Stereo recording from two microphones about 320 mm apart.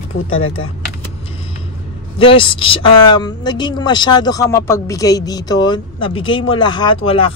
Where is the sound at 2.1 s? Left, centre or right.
Centre.